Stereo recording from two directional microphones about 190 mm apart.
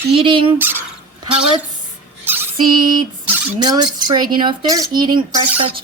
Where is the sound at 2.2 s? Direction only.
10° right (ahead or behind).